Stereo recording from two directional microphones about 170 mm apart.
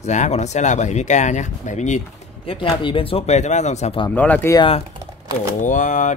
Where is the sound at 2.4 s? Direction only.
30° left (ahead or behind).